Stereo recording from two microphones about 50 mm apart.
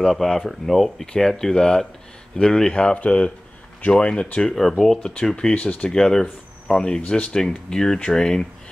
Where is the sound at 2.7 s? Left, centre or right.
Left.